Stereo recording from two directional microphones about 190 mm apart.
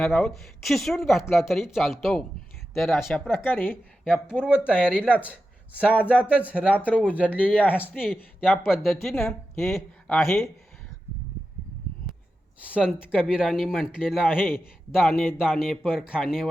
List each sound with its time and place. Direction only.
0.0 s speech: centre (ahead or behind)
3.2 s a woman's voice: 10° left (ahead or behind)
4.3 s speech: 5° right (ahead or behind)
5.7 s a woman's voice: 10° left (ahead or behind)
6.2 s speech: 5° right (ahead or behind)
7.5 s a woman's voice: 10° left (ahead or behind)
8.4 s speech: 5° right (ahead or behind)
12.6 s speech: 5° right (ahead or behind)